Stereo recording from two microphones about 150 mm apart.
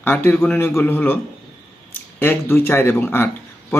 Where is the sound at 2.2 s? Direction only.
15° left (ahead or behind).